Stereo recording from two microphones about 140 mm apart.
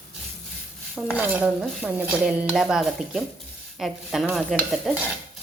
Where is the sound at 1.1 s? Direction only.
10° right (ahead or behind).